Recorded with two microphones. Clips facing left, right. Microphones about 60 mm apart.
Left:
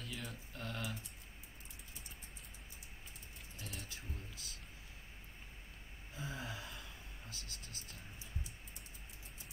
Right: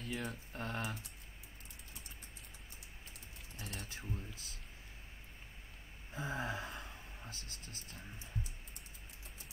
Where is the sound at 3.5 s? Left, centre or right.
Right.